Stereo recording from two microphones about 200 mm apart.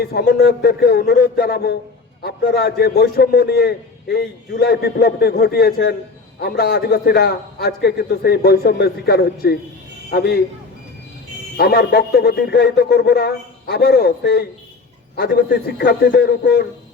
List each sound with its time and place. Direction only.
0.0 s a man's voice: 50° left (ahead or behind)
11.5 s a man's voice: 50° left (ahead or behind)